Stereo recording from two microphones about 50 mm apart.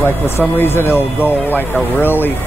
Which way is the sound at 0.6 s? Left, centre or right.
Left.